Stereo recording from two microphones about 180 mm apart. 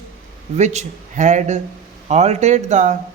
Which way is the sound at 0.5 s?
40° right (ahead or behind).